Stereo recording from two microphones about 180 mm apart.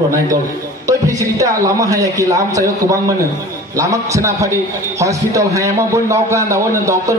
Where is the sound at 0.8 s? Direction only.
20° right (ahead or behind).